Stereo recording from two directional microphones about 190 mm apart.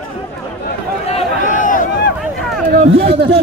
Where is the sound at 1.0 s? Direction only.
40° left (ahead or behind).